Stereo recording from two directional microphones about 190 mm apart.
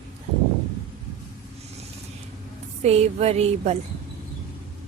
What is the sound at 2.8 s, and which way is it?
Speech, 35° right (ahead or behind).